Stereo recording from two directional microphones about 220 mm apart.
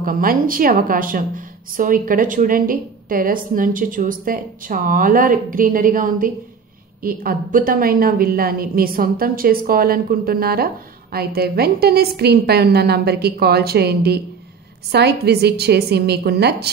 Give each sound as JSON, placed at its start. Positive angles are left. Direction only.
{"t": 0.0, "sound": "a woman's voice", "side_deg": -40}